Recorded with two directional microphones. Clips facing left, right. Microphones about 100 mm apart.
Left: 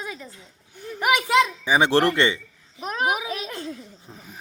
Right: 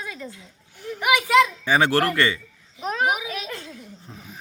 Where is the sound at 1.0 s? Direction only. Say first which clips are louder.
Even; 35° left (ahead or behind).